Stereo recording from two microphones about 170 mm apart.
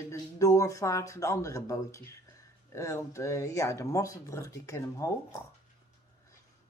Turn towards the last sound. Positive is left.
turn(degrees=20)  # may be behind; listen again after turning